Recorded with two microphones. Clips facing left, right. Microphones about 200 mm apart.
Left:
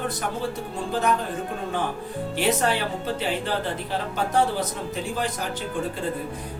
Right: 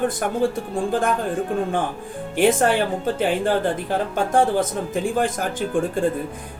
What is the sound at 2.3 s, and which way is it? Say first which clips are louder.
Speech: right 6 dB; 50° right (ahead or behind).